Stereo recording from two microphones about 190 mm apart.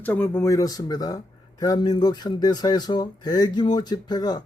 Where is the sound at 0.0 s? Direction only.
10° left (ahead or behind).